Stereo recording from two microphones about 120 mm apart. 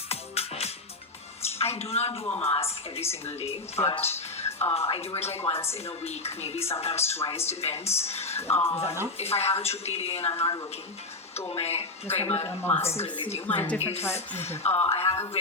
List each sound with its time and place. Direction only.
0.1 s music: 60° left (ahead or behind)
1.5 s a woman's voice: 60° left (ahead or behind)
3.8 s music: 55° left (ahead or behind)
4.7 s a woman's voice: 55° left (ahead or behind)
8.5 s speech: 20° left (ahead or behind)
9.1 s a woman's voice: 60° left (ahead or behind)
12.6 s speech: 20° left (ahead or behind)
14.6 s a woman's voice: 55° left (ahead or behind)